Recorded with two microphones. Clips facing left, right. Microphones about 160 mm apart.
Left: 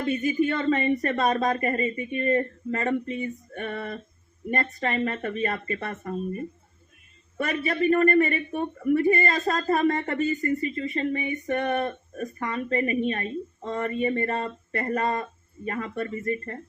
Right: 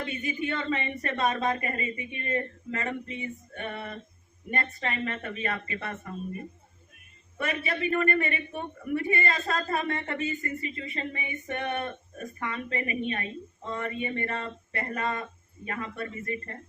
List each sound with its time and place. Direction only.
0.0 s speech: 40° left (ahead or behind)
7.3 s speech: 40° left (ahead or behind)